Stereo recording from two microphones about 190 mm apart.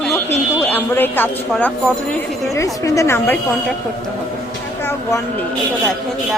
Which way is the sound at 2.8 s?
15° left (ahead or behind).